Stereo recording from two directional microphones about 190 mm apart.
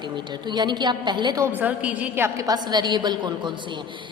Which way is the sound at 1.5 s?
10° right (ahead or behind).